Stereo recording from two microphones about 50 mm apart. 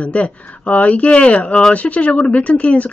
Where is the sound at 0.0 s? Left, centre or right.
Left.